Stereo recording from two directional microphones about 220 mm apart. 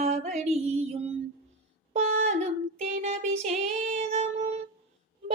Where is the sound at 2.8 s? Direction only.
30° right (ahead or behind).